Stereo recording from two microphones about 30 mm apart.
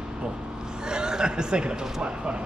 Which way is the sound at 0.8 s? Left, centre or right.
Right.